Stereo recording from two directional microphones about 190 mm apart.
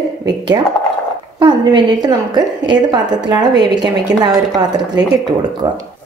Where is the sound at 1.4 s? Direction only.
25° right (ahead or behind).